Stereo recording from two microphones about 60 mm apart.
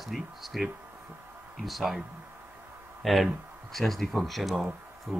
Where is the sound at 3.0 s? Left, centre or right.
Centre.